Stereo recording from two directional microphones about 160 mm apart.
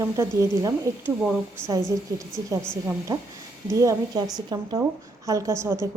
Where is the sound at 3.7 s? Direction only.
20° right (ahead or behind).